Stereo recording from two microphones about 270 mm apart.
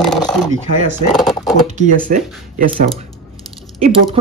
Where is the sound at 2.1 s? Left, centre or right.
Right.